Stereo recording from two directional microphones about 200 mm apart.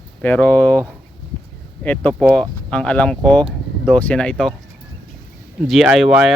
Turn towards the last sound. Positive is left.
turn(degrees=0)  # may be behind; listen again after turning